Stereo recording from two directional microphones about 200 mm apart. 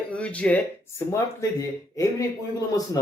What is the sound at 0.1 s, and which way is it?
Speech, 5° left (ahead or behind).